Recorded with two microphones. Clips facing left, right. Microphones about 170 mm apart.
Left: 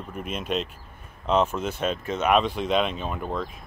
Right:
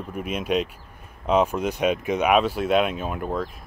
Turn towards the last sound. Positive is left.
turn(degrees=-5)  # may be behind; listen again after turning